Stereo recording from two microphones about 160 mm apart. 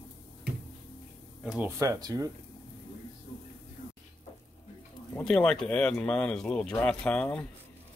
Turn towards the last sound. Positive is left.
turn(degrees=5)  # may be behind; listen again after turning